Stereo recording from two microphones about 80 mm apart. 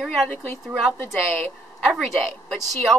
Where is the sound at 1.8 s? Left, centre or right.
Centre.